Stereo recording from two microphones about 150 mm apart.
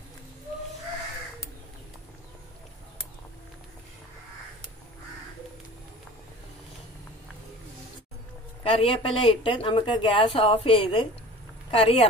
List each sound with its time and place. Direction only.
8.6 s speech: 40° left (ahead or behind)